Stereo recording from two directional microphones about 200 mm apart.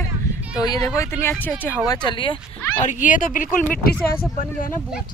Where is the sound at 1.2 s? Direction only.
5° left (ahead or behind).